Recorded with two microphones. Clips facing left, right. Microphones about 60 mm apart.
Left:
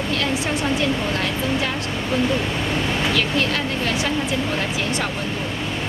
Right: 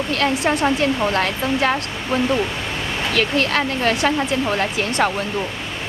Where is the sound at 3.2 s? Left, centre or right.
Right.